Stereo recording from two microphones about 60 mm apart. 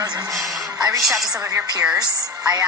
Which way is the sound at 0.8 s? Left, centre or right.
Right.